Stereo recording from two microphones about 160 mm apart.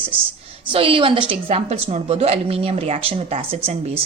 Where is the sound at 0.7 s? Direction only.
35° right (ahead or behind).